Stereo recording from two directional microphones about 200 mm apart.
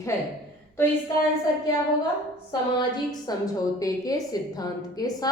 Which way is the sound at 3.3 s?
20° left (ahead or behind).